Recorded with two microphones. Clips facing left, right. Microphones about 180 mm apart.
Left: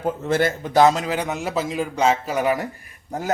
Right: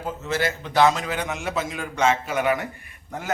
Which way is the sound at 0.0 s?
55° left (ahead or behind).